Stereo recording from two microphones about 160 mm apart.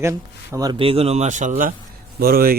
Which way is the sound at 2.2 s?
70° right (ahead or behind).